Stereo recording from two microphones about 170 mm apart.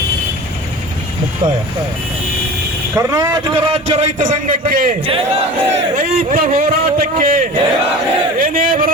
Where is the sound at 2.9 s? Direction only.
20° right (ahead or behind); by 4.9 s 55° right (ahead or behind).